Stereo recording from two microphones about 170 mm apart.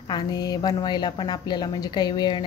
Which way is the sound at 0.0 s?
25° left (ahead or behind).